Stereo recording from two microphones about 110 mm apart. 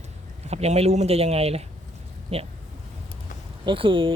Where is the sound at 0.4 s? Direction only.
75° right (ahead or behind).